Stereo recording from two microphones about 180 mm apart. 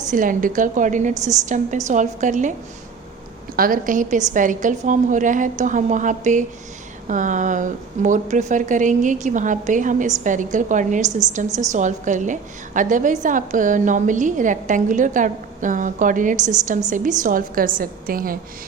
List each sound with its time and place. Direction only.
0.1 s a woman's voice: 50° right (ahead or behind)
1.1 s a woman's voice: 20° right (ahead or behind)
1.5 s a woman's voice: 45° right (ahead or behind)
11.4 s a woman's voice: 20° right (ahead or behind)
11.7 s a woman's voice: 45° right (ahead or behind)